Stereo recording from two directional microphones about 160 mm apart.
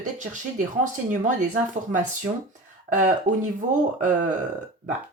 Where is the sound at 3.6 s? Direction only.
50° right (ahead or behind).